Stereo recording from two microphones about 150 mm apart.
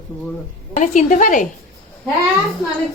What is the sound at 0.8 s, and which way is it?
Speech, 55° left (ahead or behind).